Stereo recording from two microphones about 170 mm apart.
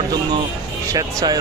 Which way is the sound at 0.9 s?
20° right (ahead or behind).